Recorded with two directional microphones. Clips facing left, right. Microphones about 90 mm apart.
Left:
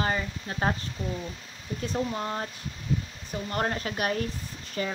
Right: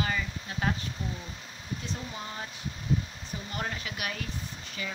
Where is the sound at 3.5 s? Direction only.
45° left (ahead or behind).